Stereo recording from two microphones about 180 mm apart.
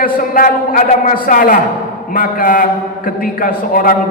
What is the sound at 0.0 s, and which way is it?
A man's voice, 50° left (ahead or behind).